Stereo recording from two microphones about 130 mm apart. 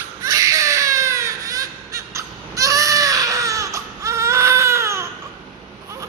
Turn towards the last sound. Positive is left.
turn(degrees=-20)  # may be behind; listen again after turning